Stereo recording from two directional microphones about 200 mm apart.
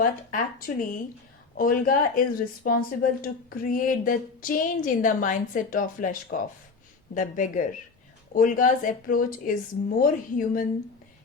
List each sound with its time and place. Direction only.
0.0 s speech: 45° left (ahead or behind)